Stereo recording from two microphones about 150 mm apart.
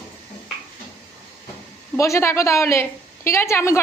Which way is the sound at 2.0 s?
20° left (ahead or behind).